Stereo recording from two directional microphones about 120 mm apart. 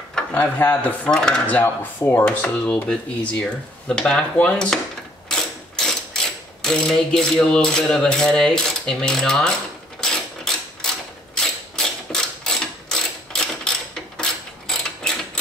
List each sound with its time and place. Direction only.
0.1 s speech: 15° left (ahead or behind)
5.3 s mechanisms: 5° left (ahead or behind)
9.9 s a sound: 5° left (ahead or behind)
11.3 s mechanisms: 5° left (ahead or behind)
14.7 s mechanisms: 5° left (ahead or behind)